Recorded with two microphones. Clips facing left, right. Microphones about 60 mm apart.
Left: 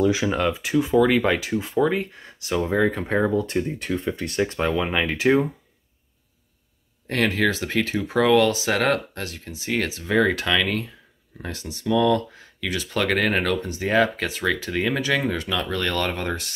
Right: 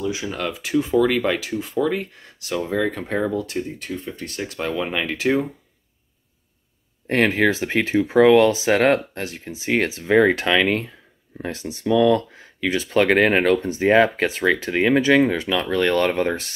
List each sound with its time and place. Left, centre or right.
0.4 s speech: left
3.8 s speech: left
4.6 s speech: centre
7.1 s speech: right